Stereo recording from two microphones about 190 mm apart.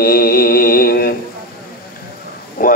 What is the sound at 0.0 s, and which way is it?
Mantra, 55° left (ahead or behind).